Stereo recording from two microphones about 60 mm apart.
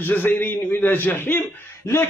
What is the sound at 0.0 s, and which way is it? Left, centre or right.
A man's voice, left.